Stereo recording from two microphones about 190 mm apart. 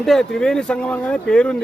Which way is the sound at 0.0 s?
Centre (ahead or behind).